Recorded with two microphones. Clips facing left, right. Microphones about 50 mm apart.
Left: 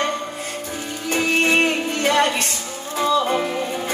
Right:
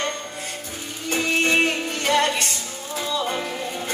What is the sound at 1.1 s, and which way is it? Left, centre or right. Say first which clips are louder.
Music: left 2 dB; centre.